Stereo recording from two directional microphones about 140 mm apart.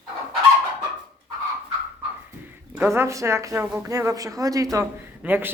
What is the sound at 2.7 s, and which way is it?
Speech, 15° right (ahead or behind).